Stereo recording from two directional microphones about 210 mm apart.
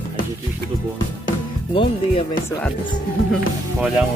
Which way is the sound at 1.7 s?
25° left (ahead or behind).